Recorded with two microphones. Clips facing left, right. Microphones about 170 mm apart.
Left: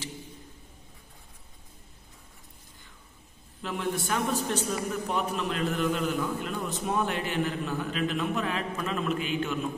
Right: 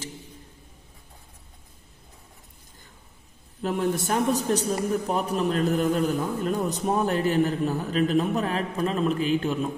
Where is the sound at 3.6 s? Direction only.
40° right (ahead or behind).